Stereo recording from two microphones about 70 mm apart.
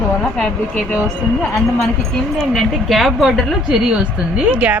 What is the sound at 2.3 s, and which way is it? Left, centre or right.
Speech, centre.